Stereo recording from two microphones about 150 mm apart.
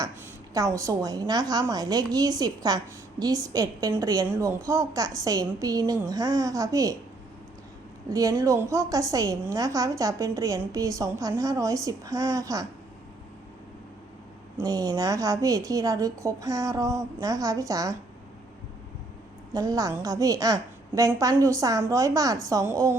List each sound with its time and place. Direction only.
0.5 s a woman's voice: 20° right (ahead or behind)
8.1 s a woman's voice: 25° right (ahead or behind)
14.6 s a woman's voice: 25° right (ahead or behind)
19.5 s a woman's voice: 25° right (ahead or behind)